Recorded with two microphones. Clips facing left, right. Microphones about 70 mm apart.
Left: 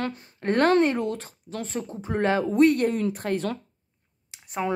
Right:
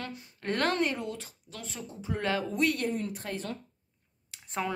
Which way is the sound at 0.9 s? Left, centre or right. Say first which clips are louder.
Left 9 dB; left.